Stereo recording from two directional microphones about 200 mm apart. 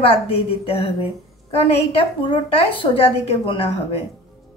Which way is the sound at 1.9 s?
25° left (ahead or behind).